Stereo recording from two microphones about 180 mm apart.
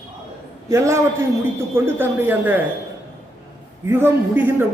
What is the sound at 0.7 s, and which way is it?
A man's voice, 15° right (ahead or behind).